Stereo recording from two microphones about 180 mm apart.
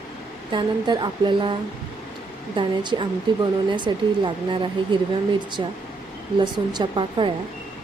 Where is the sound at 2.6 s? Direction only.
25° right (ahead or behind).